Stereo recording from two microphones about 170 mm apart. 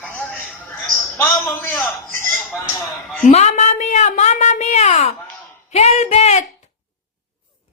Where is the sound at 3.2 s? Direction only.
45° left (ahead or behind).